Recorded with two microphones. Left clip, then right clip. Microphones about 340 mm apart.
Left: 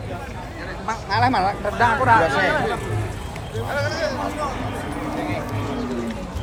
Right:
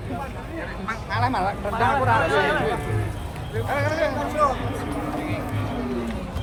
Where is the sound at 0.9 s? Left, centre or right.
Centre.